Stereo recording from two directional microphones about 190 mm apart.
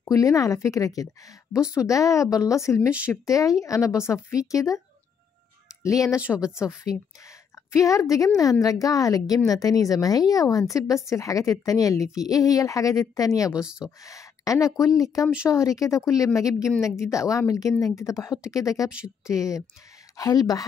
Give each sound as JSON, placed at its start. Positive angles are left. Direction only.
{"t": 0.0, "sound": "a woman's voice", "side_deg": 15}
{"t": 6.2, "sound": "speech", "side_deg": -5}
{"t": 7.7, "sound": "a woman's voice", "side_deg": 15}
{"t": 13.5, "sound": "speech", "side_deg": -5}
{"t": 13.8, "sound": "a woman's voice", "side_deg": 15}
{"t": 18.9, "sound": "speech", "side_deg": -5}
{"t": 19.2, "sound": "a woman's voice", "side_deg": 15}